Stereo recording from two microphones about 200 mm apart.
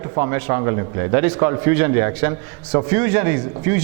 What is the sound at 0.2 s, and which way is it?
A man's voice, 15° right (ahead or behind).